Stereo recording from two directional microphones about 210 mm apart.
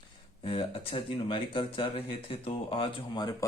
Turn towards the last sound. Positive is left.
turn(degrees=20)  # may be behind; listen again after turning